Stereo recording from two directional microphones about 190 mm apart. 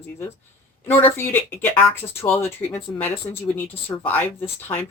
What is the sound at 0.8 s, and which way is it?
Speech, 10° left (ahead or behind).